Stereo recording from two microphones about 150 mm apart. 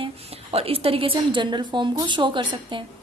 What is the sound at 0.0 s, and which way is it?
A woman's voice, 40° right (ahead or behind).